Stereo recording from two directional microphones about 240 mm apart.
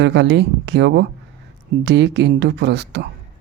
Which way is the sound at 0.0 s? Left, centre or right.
Right.